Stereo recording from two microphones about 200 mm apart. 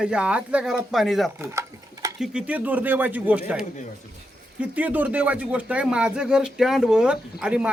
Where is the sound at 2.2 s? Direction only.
5° right (ahead or behind).